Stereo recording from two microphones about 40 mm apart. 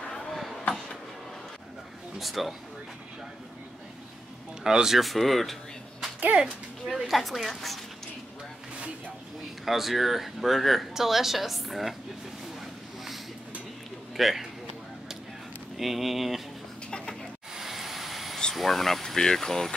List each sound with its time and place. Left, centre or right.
0.2 s a sound: centre
2.1 s speech: centre
4.6 s speech: centre
4.9 s music: centre
7.1 s speech: centre
9.7 s speech: centre
14.1 s speech: centre
15.8 s speech: centre
17.6 s vehicle: centre
18.5 s speech: centre